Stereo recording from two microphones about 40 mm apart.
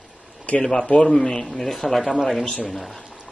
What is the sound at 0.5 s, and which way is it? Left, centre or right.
Speech, left.